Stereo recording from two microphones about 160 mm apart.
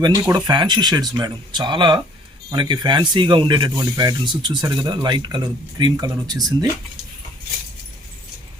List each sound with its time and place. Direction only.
0.2 s speech: 20° right (ahead or behind)